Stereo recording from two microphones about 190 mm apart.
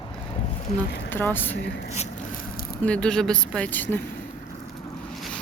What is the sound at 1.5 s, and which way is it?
Speech, 65° left (ahead or behind).